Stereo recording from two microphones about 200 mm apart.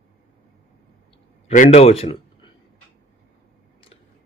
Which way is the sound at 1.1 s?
35° left (ahead or behind).